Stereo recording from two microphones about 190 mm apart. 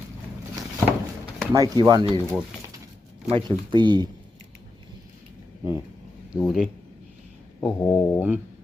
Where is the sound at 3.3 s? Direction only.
25° right (ahead or behind).